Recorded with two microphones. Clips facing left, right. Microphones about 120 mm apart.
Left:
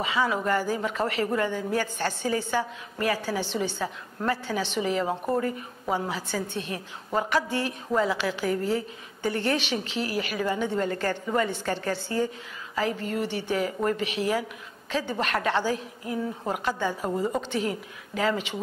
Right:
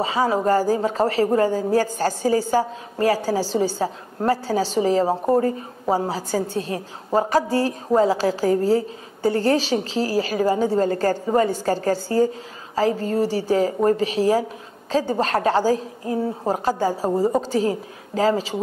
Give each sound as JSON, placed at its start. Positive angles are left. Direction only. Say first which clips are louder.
{"t": 0.0, "sound": "speech", "louder": "right 6 dB", "side_deg": -35}